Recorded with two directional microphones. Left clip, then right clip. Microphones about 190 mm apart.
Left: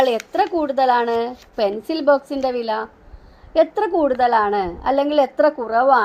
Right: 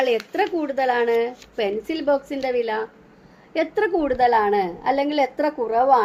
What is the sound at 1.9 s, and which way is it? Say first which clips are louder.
Speech: left 7 dB; 20° left (ahead or behind).